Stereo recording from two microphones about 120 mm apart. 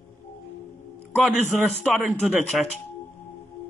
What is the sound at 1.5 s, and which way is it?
Speech, centre (ahead or behind).